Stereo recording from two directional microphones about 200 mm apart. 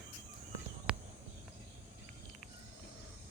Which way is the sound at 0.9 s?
5° right (ahead or behind).